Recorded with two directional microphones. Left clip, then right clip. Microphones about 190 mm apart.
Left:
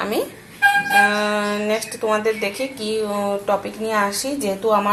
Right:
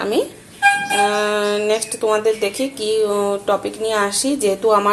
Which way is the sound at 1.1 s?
35° right (ahead or behind).